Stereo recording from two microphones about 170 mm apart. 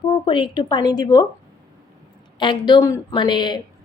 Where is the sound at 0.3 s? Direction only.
25° left (ahead or behind).